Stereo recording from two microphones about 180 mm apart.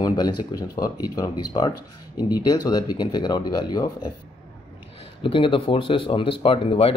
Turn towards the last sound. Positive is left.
turn(degrees=30)  # may be behind; listen again after turning